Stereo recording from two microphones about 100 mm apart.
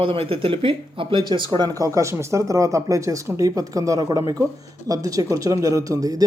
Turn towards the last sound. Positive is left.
turn(degrees=-35)  # may be behind; listen again after turning